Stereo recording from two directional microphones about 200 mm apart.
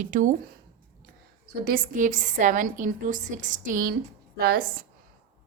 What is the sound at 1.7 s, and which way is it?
A woman's voice, 40° right (ahead or behind).